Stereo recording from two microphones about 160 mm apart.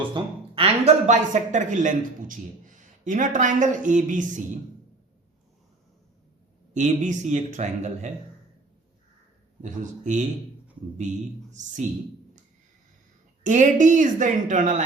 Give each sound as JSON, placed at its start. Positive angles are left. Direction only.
{"t": 0.1, "sound": "speech", "side_deg": -35}
{"t": 6.7, "sound": "speech", "side_deg": -50}
{"t": 9.6, "sound": "speech", "side_deg": -50}
{"t": 13.4, "sound": "speech", "side_deg": -50}